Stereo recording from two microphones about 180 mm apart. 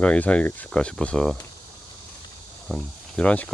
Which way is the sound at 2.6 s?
5° left (ahead or behind).